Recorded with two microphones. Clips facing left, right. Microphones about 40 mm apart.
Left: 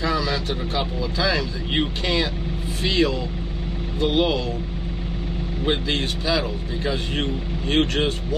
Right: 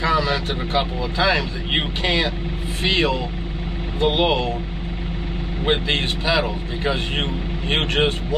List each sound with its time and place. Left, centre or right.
0.0 s speech: right
5.7 s speech: right